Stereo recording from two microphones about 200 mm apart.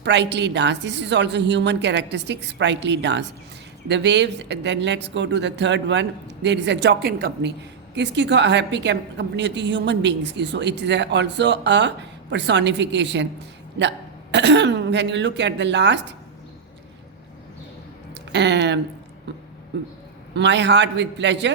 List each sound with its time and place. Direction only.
0.0 s a woman's voice: 60° right (ahead or behind)
18.1 s speech: 60° right (ahead or behind)
20.3 s a woman's voice: 60° right (ahead or behind)